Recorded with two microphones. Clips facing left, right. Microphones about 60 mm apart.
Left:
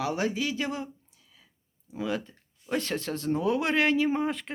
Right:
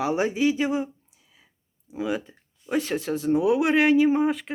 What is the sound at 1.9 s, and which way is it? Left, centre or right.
Speech, centre.